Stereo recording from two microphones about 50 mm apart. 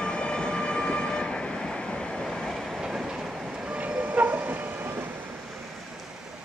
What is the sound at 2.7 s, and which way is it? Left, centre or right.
Train, centre.